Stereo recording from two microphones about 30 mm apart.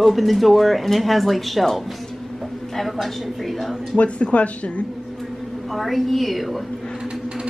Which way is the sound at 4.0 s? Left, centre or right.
Left.